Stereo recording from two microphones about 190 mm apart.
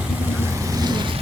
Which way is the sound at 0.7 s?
20° right (ahead or behind).